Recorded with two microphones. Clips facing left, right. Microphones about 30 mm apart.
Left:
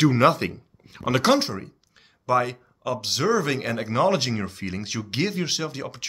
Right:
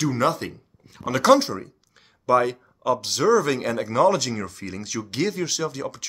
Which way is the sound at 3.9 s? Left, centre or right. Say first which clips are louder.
Right 2 dB; left.